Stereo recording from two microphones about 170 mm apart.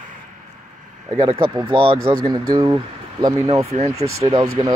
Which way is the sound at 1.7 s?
30° right (ahead or behind).